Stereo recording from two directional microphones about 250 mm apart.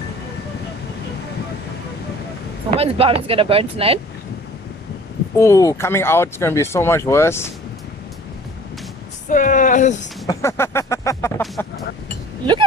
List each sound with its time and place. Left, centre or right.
2.7 s speech: right
5.4 s speech: centre
9.3 s speech: left
10.2 s a sound: centre